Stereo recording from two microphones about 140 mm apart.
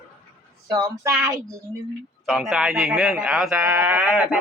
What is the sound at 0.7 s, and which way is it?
Speech, 25° right (ahead or behind).